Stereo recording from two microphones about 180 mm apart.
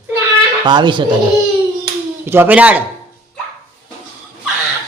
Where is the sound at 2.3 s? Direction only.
10° right (ahead or behind).